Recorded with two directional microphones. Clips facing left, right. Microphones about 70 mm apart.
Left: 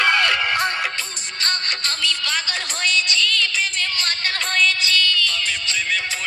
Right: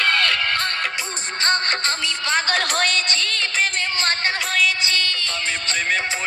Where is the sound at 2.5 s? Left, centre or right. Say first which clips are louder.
Right 4 dB; right.